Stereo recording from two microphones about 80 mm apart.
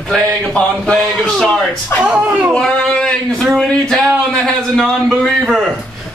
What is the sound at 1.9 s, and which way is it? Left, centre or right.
Speech, left.